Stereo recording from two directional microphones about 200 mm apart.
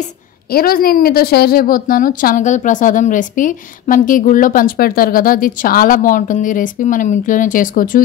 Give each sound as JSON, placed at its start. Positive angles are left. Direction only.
{"t": 0.0, "sound": "a woman's voice", "side_deg": 50}